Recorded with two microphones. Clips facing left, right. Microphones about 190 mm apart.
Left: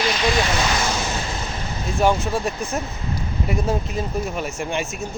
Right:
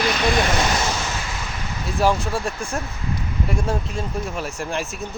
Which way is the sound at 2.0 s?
Centre (ahead or behind).